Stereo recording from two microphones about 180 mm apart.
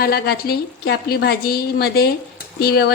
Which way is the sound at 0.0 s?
60° left (ahead or behind).